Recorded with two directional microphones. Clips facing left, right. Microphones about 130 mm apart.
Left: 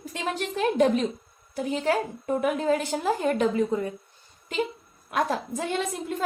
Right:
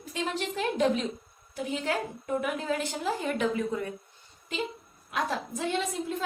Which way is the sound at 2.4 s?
45° left (ahead or behind).